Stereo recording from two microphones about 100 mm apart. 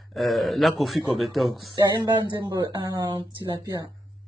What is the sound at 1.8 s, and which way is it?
Speech, 45° right (ahead or behind).